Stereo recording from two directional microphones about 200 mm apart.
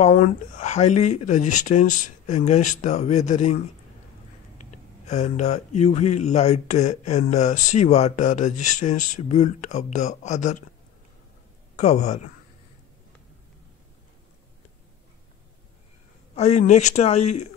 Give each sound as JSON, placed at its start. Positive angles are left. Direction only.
{"t": 0.0, "sound": "speech", "side_deg": 35}
{"t": 5.0, "sound": "speech", "side_deg": 35}
{"t": 11.7, "sound": "speech", "side_deg": 35}
{"t": 16.3, "sound": "speech", "side_deg": 35}